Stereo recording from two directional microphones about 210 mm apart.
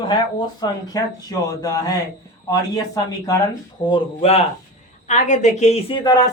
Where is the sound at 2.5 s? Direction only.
15° left (ahead or behind).